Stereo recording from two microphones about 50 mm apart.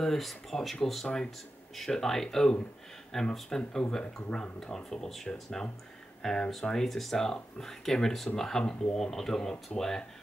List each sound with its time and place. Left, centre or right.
0.0 s speech: centre
1.0 s speech: centre